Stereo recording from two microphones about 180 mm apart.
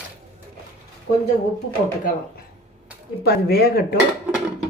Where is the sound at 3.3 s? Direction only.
60° left (ahead or behind).